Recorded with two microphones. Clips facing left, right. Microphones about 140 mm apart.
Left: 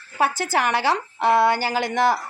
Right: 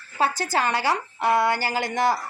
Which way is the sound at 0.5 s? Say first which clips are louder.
Left 3 dB; 20° left (ahead or behind).